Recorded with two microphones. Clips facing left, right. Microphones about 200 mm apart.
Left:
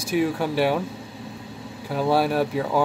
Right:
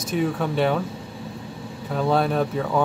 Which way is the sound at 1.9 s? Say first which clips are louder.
Even; 5° left (ahead or behind).